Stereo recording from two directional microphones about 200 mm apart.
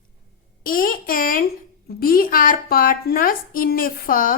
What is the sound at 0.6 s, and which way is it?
Speech, 45° left (ahead or behind).